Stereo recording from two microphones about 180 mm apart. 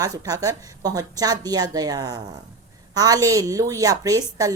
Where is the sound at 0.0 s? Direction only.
20° right (ahead or behind).